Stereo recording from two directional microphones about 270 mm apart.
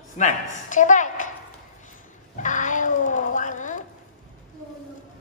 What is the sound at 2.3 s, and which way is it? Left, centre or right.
Cat, left.